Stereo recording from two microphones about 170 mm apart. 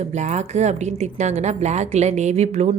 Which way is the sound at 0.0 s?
45° right (ahead or behind).